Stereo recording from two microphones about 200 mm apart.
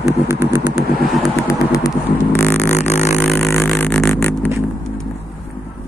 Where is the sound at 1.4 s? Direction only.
15° left (ahead or behind).